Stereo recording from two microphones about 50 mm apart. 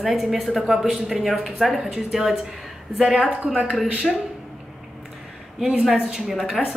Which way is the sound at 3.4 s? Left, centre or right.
Right.